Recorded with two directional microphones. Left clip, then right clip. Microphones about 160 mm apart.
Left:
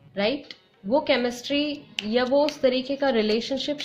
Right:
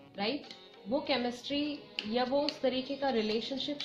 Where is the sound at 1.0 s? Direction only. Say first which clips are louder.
Left 9 dB; 90° left.